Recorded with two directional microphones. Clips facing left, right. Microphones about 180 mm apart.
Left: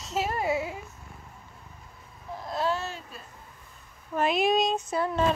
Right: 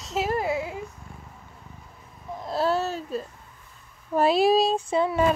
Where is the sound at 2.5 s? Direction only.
35° right (ahead or behind).